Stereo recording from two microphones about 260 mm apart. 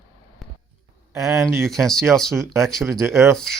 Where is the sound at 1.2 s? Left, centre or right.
Centre.